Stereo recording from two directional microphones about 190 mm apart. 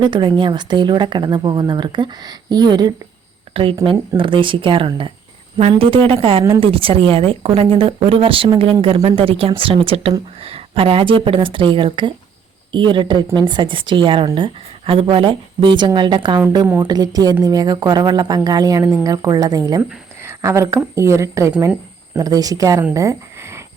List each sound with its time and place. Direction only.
0.0 s a woman's voice: 25° right (ahead or behind)